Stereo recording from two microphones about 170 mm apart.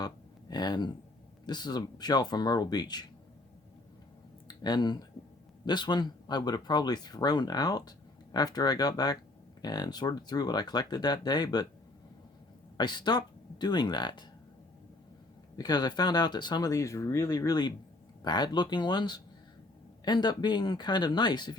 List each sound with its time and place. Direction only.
0.5 s speech: 25° left (ahead or behind)
4.4 s speech: 25° left (ahead or behind)
12.7 s speech: 25° left (ahead or behind)
15.5 s speech: 25° left (ahead or behind)